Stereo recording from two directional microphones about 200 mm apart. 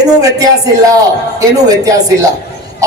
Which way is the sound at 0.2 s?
15° right (ahead or behind).